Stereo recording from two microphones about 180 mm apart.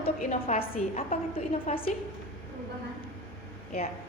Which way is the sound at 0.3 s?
40° left (ahead or behind).